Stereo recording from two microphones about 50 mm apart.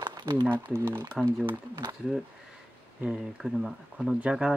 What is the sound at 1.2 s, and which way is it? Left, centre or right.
Speech, right.